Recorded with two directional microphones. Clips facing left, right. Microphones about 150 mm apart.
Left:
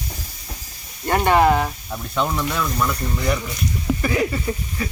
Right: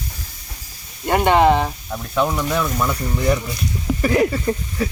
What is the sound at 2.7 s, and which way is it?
Speech, 25° right (ahead or behind).